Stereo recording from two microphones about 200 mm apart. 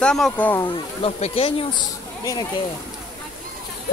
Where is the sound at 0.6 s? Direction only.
30° left (ahead or behind).